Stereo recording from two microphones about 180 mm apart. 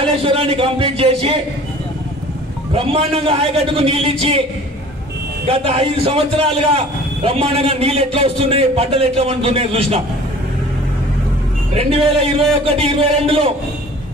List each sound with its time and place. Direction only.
0.0 s speech: 30° right (ahead or behind)
2.7 s a man's voice: 30° right (ahead or behind)
5.5 s a man's voice: 30° right (ahead or behind)
11.8 s a man's voice: 30° right (ahead or behind)